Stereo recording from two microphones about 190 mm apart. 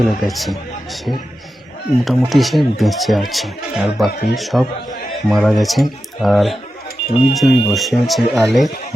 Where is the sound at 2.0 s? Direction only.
Centre (ahead or behind).